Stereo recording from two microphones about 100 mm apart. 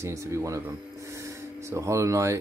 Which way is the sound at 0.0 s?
30° right (ahead or behind).